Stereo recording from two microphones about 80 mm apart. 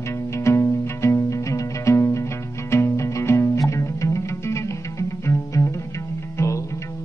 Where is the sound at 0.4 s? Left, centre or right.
Left.